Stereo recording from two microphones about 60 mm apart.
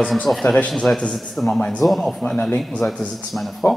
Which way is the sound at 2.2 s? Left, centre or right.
Centre.